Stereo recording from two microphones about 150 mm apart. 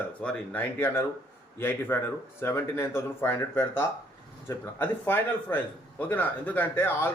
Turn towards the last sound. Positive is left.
turn(degrees=15)  # may be behind; listen again after turning